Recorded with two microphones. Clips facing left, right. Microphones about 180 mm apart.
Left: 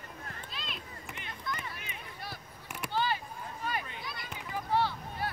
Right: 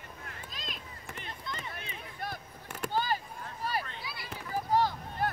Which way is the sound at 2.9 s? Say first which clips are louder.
Even; 45° right (ahead or behind).